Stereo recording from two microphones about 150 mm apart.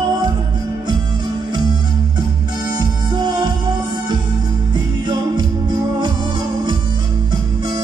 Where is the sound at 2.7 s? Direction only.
30° right (ahead or behind).